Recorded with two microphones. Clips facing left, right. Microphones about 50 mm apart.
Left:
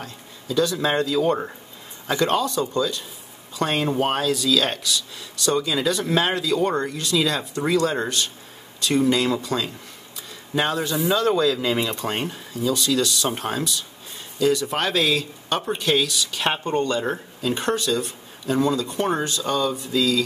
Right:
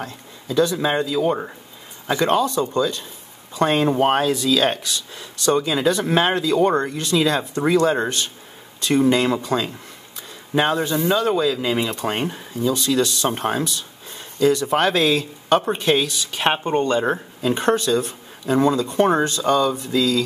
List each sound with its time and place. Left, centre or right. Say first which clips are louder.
0.0 s speech: right 4 dB; right
0.7 s speech: right 1 dB; centre
2.0 s speech: right 3 dB; right
11.1 s speech: even; centre
11.9 s speech: right 3 dB; right
12.7 s speech: right 1 dB; right